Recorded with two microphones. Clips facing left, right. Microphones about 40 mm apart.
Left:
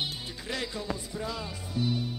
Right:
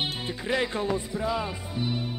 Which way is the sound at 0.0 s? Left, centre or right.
Right.